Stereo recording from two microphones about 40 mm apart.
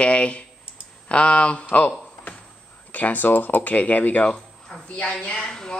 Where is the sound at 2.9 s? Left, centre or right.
Left.